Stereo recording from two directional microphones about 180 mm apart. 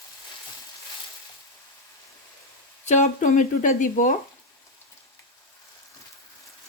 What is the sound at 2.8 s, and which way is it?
Speech, 40° left (ahead or behind).